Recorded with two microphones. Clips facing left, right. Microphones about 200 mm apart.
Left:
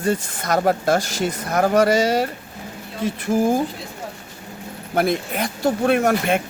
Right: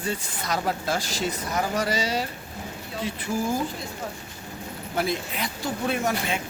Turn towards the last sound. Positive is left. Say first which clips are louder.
# left 8 dB
turn(degrees=60)  # may be behind; listen again after turning